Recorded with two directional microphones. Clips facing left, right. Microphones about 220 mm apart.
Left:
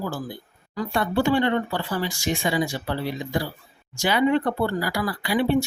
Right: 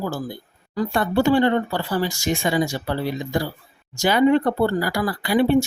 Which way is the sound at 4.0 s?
40° right (ahead or behind).